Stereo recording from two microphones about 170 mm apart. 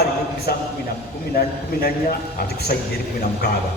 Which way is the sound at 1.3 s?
65° left (ahead or behind).